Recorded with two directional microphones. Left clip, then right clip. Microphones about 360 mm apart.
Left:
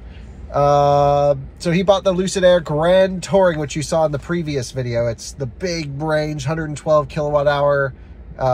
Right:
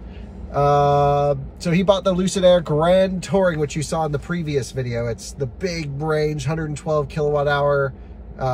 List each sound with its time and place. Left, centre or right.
0.5 s speech: centre